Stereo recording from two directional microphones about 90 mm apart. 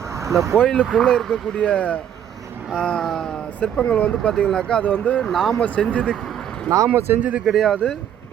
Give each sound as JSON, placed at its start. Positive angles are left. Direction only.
{"t": 0.1, "sound": "vehicle", "side_deg": -35}
{"t": 0.5, "sound": "speech", "side_deg": 10}
{"t": 5.5, "sound": "speech", "side_deg": 15}
{"t": 6.7, "sound": "speech", "side_deg": -35}
{"t": 7.4, "sound": "speech", "side_deg": 0}